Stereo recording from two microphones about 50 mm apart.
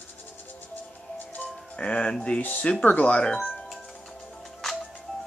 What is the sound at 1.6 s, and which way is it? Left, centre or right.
Music, left.